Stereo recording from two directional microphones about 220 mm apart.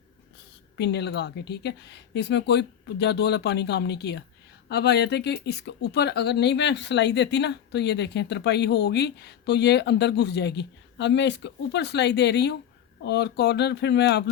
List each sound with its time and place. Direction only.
0.8 s speech: 50° left (ahead or behind)